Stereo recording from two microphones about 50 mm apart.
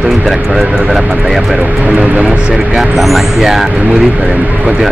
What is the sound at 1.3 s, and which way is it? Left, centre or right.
Speech, centre.